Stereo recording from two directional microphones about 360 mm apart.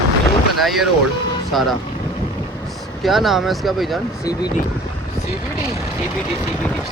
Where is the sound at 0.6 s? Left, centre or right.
Centre.